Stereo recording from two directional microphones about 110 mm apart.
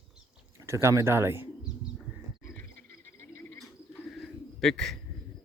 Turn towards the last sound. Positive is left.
turn(degrees=5)  # may be behind; listen again after turning